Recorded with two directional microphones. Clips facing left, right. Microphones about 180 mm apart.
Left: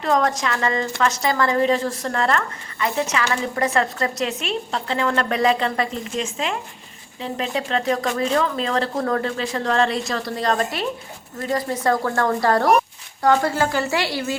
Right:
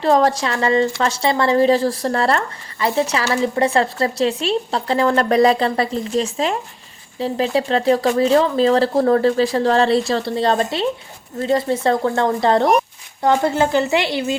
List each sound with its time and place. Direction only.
0.0 s a woman's voice: 30° right (ahead or behind)